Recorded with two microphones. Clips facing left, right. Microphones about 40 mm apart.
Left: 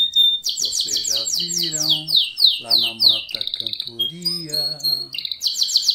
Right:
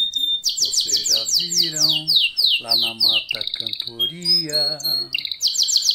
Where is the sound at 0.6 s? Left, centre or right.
Right.